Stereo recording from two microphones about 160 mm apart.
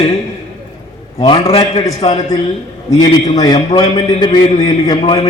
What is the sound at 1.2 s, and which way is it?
A man's voice, 35° left (ahead or behind).